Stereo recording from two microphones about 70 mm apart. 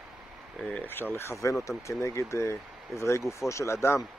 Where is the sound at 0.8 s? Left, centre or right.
Left.